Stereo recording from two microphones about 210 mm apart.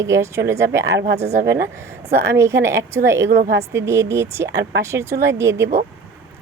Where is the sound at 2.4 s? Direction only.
15° right (ahead or behind).